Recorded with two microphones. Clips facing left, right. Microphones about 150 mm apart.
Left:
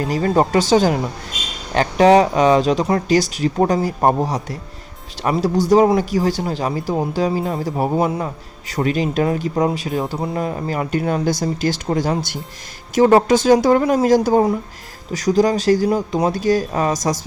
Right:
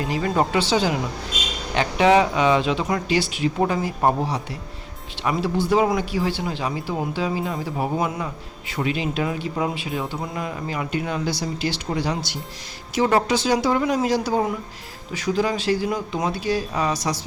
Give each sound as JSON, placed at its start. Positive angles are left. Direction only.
{"t": 0.1, "sound": "speech", "side_deg": 40}